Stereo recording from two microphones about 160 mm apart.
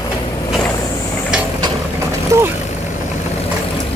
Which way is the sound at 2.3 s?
20° right (ahead or behind).